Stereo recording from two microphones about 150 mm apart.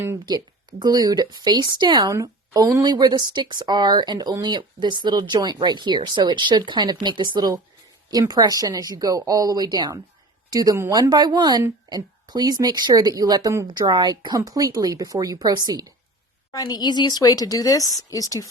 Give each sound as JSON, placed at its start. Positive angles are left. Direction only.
{"t": 0.8, "sound": "a woman's voice", "side_deg": -25}
{"t": 16.5, "sound": "a woman's voice", "side_deg": 25}